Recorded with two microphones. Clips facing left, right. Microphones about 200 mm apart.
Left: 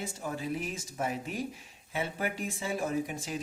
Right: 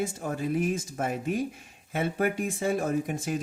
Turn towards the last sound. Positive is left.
turn(degrees=-50)  # may be behind; listen again after turning